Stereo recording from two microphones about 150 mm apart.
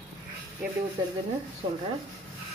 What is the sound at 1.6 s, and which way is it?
Speech, 40° right (ahead or behind).